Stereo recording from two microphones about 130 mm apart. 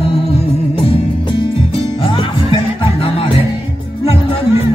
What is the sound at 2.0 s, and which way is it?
Music, 35° left (ahead or behind).